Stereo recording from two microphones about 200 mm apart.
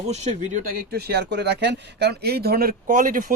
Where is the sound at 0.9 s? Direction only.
55° right (ahead or behind).